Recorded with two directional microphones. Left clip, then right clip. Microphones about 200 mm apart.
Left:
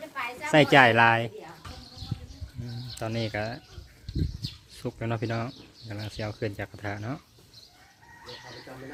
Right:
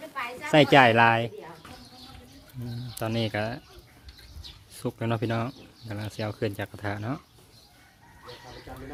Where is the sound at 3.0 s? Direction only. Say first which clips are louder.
Right 2 dB; 15° right (ahead or behind).